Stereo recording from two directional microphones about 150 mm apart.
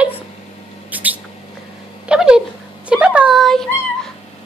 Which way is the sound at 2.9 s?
5° right (ahead or behind).